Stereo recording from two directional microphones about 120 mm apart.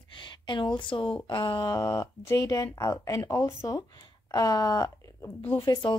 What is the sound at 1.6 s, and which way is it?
Speech, 30° left (ahead or behind).